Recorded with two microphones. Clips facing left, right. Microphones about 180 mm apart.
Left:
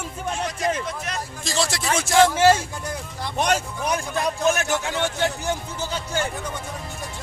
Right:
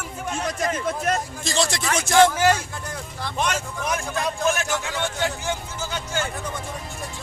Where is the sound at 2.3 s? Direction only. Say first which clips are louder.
Left 3 dB; 25° left (ahead or behind).